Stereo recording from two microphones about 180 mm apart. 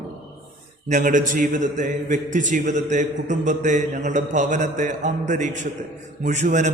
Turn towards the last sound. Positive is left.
turn(degrees=-40)  # may be behind; listen again after turning